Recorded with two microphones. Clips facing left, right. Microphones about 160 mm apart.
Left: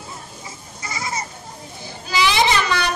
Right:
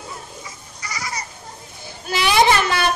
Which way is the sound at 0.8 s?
25° left (ahead or behind).